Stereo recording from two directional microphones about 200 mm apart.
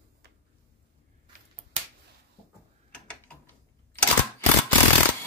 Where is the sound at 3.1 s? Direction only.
10° left (ahead or behind).